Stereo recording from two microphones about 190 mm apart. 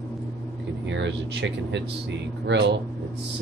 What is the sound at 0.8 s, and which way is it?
Speech, 70° right (ahead or behind).